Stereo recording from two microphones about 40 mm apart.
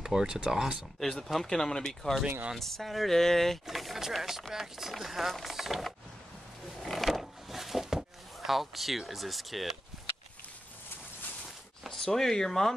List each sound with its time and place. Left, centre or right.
0.0 s speech: centre
1.1 s speech: centre
1.9 s speech: centre
3.6 s speech: centre
6.8 s a sound: centre
8.4 s speech: centre
12.0 s speech: centre